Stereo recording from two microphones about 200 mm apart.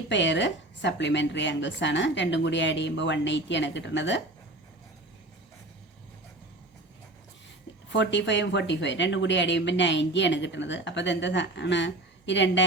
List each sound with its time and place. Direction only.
0.1 s speech: 65° left (ahead or behind)
7.9 s speech: 60° left (ahead or behind)